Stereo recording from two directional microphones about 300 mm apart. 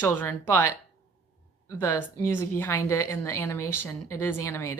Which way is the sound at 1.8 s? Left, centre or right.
Centre.